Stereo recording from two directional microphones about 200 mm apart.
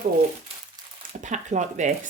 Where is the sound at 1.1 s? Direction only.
35° right (ahead or behind).